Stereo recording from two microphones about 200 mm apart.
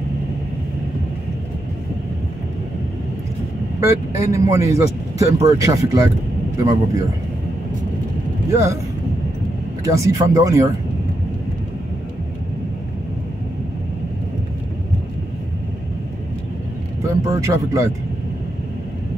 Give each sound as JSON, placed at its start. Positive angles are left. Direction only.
{"t": 3.8, "sound": "speech", "side_deg": -15}
{"t": 8.5, "sound": "speech", "side_deg": -15}
{"t": 9.8, "sound": "speech", "side_deg": -15}
{"t": 17.0, "sound": "speech", "side_deg": -15}